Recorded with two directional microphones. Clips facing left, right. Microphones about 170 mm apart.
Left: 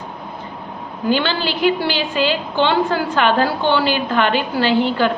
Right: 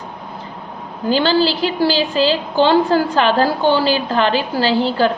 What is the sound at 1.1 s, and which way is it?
A woman's voice, 35° right (ahead or behind).